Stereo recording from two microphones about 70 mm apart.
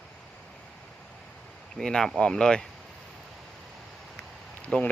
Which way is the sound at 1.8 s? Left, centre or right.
Centre.